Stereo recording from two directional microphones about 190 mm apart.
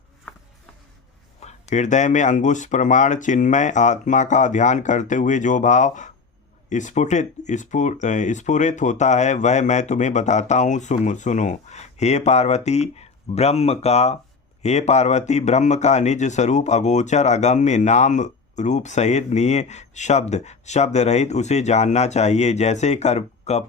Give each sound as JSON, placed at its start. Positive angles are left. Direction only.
{"t": 1.4, "sound": "speech", "side_deg": 35}